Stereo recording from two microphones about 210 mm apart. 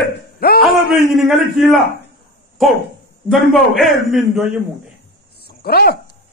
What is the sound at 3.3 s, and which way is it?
A man's voice, centre (ahead or behind).